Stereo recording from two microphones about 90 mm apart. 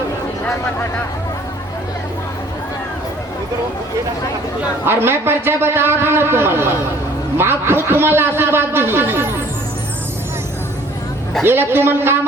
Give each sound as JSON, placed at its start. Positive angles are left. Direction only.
{"t": 0.4, "sound": "speech", "side_deg": 20}
{"t": 4.9, "sound": "a man's voice", "side_deg": -25}
{"t": 11.4, "sound": "a man's voice", "side_deg": -25}